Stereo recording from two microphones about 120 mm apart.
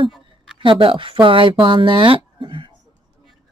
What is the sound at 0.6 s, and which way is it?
Speech, 45° right (ahead or behind).